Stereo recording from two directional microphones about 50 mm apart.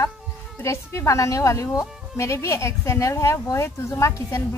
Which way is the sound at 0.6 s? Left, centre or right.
Left.